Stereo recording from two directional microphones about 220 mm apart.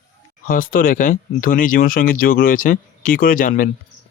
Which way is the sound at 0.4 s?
40° left (ahead or behind).